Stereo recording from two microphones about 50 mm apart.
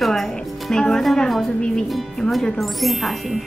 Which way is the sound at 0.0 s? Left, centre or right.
Centre.